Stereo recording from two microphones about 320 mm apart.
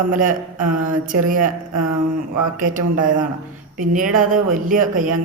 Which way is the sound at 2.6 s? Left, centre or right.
Right.